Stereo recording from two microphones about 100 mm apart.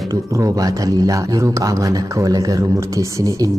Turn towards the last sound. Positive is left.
turn(degrees=-35)  # may be behind; listen again after turning